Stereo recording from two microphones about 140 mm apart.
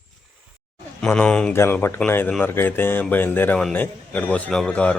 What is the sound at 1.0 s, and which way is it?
Speech, 5° left (ahead or behind).